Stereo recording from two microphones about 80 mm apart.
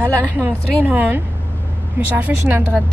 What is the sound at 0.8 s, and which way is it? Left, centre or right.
Speech, right.